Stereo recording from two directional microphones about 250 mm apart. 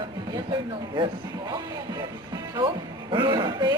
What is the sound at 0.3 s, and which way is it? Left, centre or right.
Speech, centre.